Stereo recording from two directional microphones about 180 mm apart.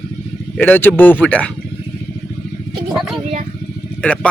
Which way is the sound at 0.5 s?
10° left (ahead or behind).